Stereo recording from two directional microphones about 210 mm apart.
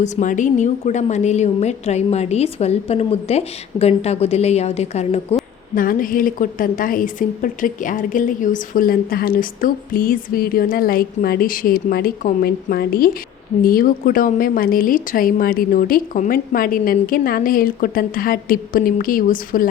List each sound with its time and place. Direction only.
0.0 s a woman's voice: 35° left (ahead or behind)
5.7 s a woman's voice: 40° left (ahead or behind)